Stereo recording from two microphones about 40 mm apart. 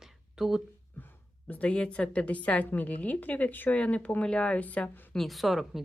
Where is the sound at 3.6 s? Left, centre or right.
Left.